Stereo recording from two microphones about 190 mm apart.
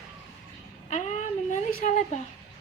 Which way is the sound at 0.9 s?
40° left (ahead or behind).